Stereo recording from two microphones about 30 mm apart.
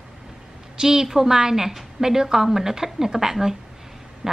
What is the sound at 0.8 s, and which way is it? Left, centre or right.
A woman's voice, centre.